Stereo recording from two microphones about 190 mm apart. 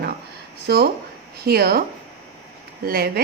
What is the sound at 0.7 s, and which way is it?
Speech, 60° right (ahead or behind).